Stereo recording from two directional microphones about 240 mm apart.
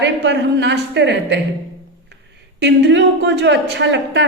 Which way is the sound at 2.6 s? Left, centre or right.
Right.